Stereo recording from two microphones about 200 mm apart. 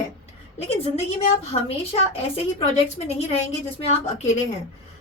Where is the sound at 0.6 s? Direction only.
30° left (ahead or behind).